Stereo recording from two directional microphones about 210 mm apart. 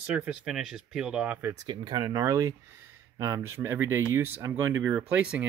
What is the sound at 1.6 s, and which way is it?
Speech, 20° right (ahead or behind).